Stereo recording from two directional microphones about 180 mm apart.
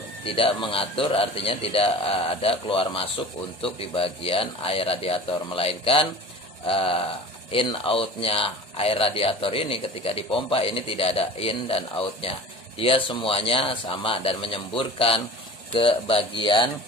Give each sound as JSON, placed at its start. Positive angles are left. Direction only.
{"t": 0.2, "sound": "speech", "side_deg": 30}